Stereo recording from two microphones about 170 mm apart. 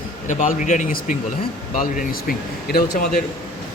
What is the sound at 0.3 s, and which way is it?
Speech, 45° left (ahead or behind).